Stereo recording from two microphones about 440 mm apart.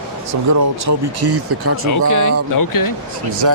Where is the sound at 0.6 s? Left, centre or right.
Right.